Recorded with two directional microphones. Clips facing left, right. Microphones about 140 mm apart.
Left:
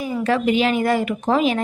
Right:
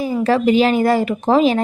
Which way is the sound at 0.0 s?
30° right (ahead or behind).